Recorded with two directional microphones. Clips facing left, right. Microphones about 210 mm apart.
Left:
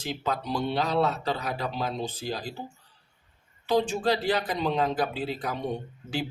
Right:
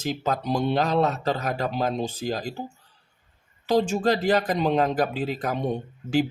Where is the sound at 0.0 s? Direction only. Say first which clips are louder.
Right 4 dB; 45° right (ahead or behind).